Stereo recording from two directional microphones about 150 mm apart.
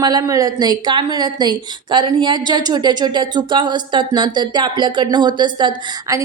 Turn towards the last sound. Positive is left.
turn(degrees=-25)  # may be behind; listen again after turning